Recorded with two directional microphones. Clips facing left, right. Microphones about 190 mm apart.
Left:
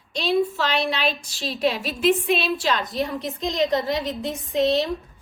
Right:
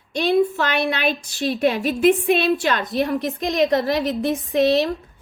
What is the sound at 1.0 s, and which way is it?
Speech, 55° right (ahead or behind).